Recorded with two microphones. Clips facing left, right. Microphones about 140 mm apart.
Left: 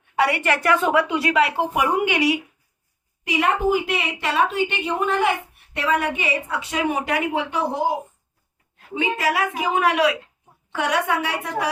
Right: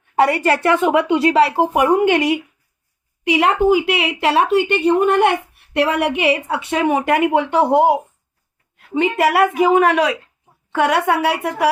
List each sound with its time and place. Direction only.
0.2 s a woman's voice: 40° right (ahead or behind)
1.7 s a woman's voice: 50° right (ahead or behind)
3.2 s a woman's voice: 75° right (ahead or behind)
9.0 s a woman's voice: 65° right (ahead or behind)